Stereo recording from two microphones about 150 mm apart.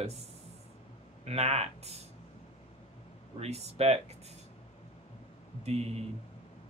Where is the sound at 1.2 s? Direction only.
45° right (ahead or behind).